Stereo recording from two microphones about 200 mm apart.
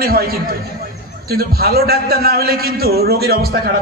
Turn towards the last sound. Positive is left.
turn(degrees=-50)  # may be behind; listen again after turning